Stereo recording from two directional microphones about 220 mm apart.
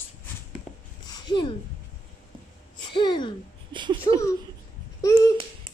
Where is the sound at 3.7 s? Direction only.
20° right (ahead or behind).